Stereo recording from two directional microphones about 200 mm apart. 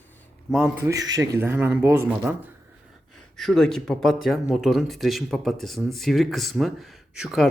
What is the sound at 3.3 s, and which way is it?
Speech, centre (ahead or behind).